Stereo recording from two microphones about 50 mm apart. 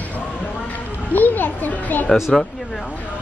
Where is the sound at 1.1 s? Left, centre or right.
Left.